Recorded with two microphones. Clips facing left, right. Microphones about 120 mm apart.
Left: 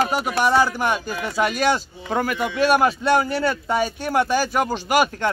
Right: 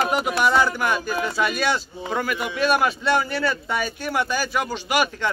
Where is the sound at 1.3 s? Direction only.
35° left (ahead or behind).